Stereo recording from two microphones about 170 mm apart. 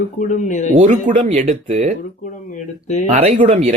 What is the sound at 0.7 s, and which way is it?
Speech, 50° right (ahead or behind).